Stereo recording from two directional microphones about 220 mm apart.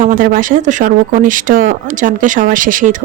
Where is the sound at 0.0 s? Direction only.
35° right (ahead or behind).